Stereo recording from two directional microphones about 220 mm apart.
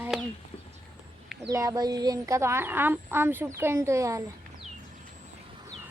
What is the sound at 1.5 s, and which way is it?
Speech, 15° right (ahead or behind).